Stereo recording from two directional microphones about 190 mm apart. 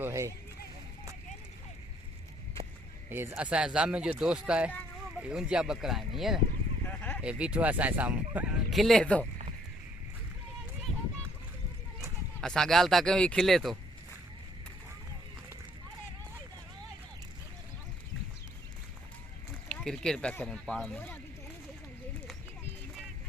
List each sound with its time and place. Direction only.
0.0 s speech: 15° right (ahead or behind)
3.1 s speech: 10° right (ahead or behind)
6.8 s dog: 10° left (ahead or behind)
7.2 s speech: 5° right (ahead or behind)
12.4 s speech: centre (ahead or behind)
19.6 s speech: 5° left (ahead or behind)